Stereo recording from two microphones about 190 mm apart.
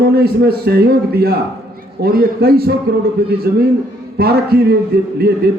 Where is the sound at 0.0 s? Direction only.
55° right (ahead or behind).